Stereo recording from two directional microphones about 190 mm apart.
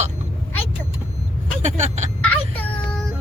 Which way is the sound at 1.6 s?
35° right (ahead or behind).